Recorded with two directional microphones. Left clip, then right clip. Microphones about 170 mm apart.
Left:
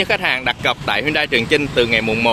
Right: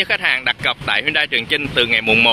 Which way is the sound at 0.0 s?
5° left (ahead or behind).